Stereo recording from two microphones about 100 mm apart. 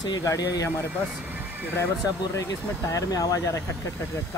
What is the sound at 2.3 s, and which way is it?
Speech, 35° left (ahead or behind).